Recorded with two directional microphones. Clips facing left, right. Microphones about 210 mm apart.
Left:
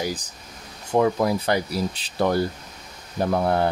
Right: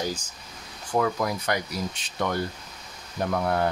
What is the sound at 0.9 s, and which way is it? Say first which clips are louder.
Speech: left 5 dB; 25° left (ahead or behind).